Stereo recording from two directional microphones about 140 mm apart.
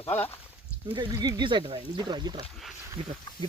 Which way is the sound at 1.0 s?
30° right (ahead or behind).